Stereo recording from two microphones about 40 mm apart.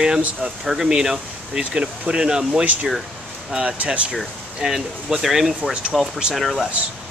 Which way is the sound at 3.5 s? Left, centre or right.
Right.